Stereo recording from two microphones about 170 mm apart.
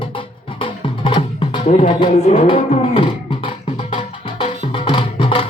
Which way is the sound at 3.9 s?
30° left (ahead or behind).